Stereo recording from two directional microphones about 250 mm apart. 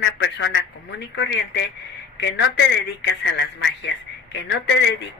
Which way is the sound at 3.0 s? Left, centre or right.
Left.